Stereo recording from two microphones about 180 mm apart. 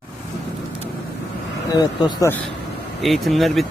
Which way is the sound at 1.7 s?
20° left (ahead or behind).